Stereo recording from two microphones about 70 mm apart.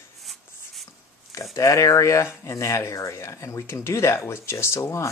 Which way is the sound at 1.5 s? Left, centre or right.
Left.